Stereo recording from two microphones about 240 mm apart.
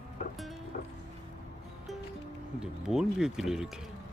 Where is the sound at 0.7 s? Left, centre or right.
Left.